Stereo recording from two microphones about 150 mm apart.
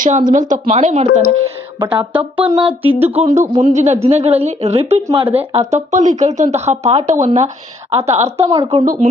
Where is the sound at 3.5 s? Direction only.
55° right (ahead or behind).